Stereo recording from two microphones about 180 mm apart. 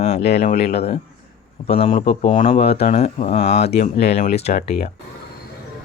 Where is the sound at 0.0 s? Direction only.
35° left (ahead or behind).